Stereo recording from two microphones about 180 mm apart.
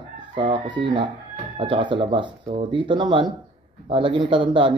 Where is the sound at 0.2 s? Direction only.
25° right (ahead or behind).